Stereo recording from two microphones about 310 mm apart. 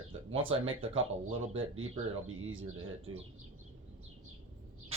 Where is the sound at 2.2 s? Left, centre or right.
Right.